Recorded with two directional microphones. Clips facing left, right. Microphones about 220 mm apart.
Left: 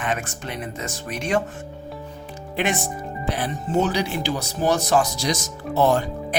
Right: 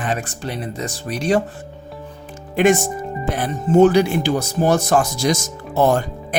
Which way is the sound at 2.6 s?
45° right (ahead or behind).